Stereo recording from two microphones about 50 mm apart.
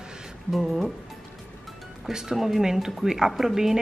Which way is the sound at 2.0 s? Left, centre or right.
Centre.